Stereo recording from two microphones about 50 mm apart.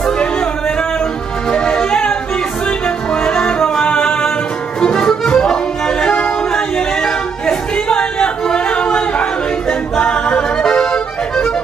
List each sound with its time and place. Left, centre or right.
1.5 s music: centre
3.3 s music: centre
9.7 s a capella: centre
10.6 s accordion: centre